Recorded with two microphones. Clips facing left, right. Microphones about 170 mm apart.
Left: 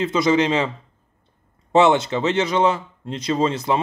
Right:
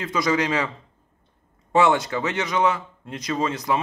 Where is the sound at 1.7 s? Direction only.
25° left (ahead or behind).